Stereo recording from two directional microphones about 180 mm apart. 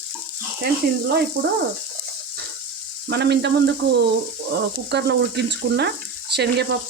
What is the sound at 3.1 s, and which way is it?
Frying, 70° right (ahead or behind).